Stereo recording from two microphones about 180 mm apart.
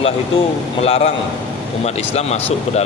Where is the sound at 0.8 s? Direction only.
35° left (ahead or behind).